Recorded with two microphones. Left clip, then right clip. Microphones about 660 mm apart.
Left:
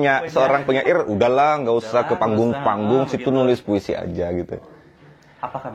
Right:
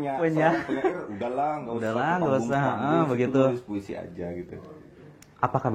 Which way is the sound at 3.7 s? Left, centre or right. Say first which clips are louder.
Left 13 dB; left.